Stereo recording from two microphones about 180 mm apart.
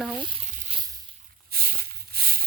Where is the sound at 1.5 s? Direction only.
55° right (ahead or behind).